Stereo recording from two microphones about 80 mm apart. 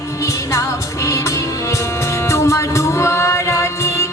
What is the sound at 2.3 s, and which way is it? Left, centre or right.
Music, left.